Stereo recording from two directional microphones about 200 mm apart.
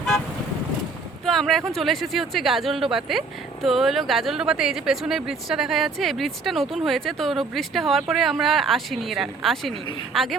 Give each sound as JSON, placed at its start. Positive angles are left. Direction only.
{"t": 1.2, "sound": "speech", "side_deg": 0}